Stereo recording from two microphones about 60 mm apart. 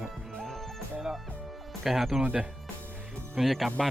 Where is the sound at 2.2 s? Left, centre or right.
Right.